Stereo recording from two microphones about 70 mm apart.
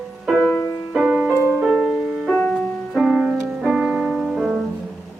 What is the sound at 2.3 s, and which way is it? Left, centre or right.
Music, centre.